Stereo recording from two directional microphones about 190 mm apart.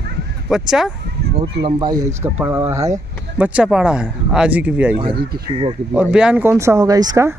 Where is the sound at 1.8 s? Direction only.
20° right (ahead or behind).